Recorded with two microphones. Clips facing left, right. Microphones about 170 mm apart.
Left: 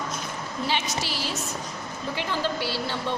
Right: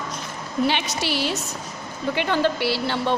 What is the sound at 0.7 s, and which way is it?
A woman's voice, 70° right (ahead or behind).